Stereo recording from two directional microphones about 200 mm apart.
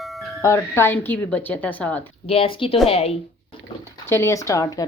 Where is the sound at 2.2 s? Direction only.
30° left (ahead or behind).